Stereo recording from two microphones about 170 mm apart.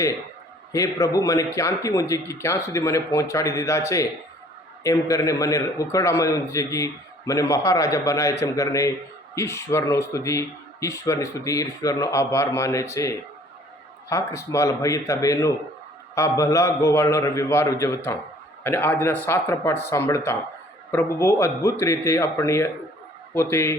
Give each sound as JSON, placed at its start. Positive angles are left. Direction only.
{"t": 0.7, "sound": "a man's voice", "side_deg": 20}